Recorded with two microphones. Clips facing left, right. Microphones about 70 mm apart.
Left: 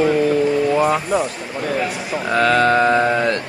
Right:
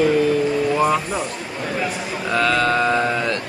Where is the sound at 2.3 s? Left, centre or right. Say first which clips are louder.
Left 4 dB; left.